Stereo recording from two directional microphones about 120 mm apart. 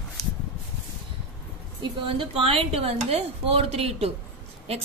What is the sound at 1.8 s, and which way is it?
A woman's voice, 45° right (ahead or behind).